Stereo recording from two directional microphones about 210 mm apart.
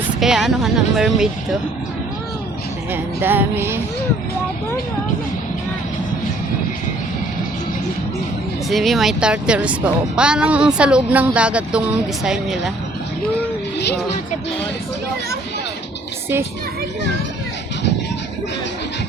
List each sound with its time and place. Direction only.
0.2 s speech: centre (ahead or behind)
2.9 s music: 10° right (ahead or behind)
8.7 s speech: centre (ahead or behind)
13.7 s music: 50° left (ahead or behind)